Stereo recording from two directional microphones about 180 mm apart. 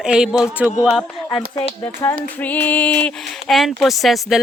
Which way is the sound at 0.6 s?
5° right (ahead or behind).